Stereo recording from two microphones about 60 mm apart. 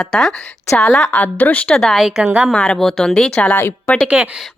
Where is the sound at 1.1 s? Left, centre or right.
Left.